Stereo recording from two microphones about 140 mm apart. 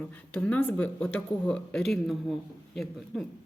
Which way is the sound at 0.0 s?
5° left (ahead or behind).